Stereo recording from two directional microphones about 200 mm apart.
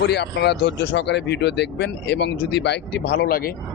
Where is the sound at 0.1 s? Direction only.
55° left (ahead or behind).